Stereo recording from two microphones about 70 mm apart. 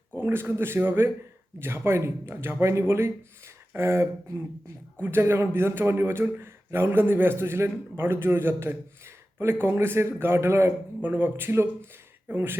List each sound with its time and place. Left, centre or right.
0.2 s a man's voice: right
4.9 s a man's voice: right
5.2 s a man's voice: right